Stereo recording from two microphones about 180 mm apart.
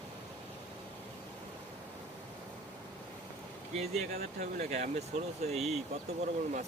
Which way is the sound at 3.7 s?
35° right (ahead or behind).